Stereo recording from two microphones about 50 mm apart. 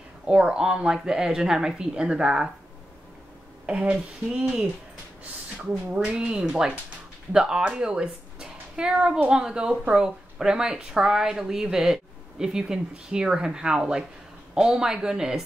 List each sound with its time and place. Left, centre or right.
0.3 s speech: centre
3.6 s speech: right
5.7 s a woman's voice: centre